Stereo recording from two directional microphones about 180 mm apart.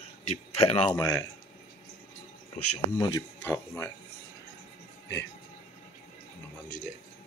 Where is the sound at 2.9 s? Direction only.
20° left (ahead or behind).